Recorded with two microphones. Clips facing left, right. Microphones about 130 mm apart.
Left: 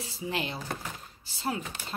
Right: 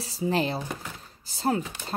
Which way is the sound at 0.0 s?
35° right (ahead or behind).